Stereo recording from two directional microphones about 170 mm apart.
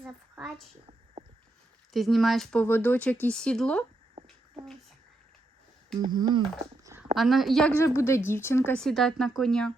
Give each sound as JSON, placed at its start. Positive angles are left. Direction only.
{"t": 1.9, "sound": "speech", "side_deg": 0}
{"t": 6.0, "sound": "speech", "side_deg": -25}
{"t": 7.2, "sound": "speech", "side_deg": 0}